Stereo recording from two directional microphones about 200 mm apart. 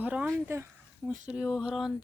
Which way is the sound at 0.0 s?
10° right (ahead or behind).